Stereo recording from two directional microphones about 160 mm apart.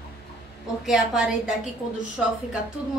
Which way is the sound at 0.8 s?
5° right (ahead or behind).